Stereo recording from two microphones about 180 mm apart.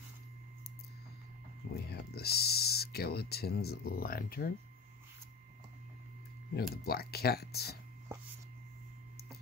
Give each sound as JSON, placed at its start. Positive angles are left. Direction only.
{"t": 1.7, "sound": "speech", "side_deg": 65}
{"t": 6.5, "sound": "speech", "side_deg": 60}